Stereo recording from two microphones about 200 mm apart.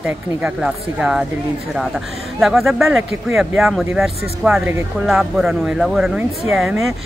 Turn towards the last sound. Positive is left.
turn(degrees=0)  # may be behind; listen again after turning